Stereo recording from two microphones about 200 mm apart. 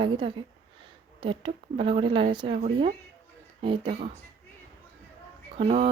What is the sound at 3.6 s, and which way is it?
Speech, 25° right (ahead or behind).